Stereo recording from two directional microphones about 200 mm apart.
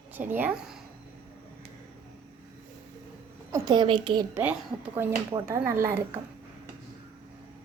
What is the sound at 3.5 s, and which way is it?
A woman's voice, 20° right (ahead or behind).